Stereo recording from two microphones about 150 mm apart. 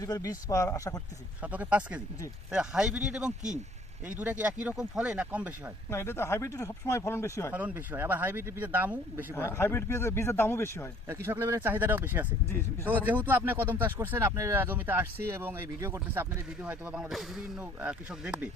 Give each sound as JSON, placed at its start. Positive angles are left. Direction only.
{"t": 0.0, "sound": "speech", "side_deg": 25}
{"t": 1.4, "sound": "speech", "side_deg": -10}
{"t": 5.9, "sound": "speech", "side_deg": 15}
{"t": 7.5, "sound": "speech", "side_deg": -10}
{"t": 9.4, "sound": "speech", "side_deg": 15}
{"t": 11.1, "sound": "speech", "side_deg": -15}